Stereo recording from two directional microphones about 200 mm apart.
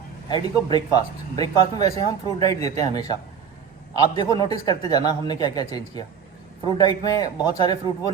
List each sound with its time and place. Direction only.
0.3 s speech: 20° left (ahead or behind)